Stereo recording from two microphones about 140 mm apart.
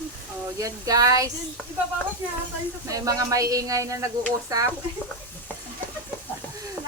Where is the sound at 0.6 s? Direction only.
25° right (ahead or behind).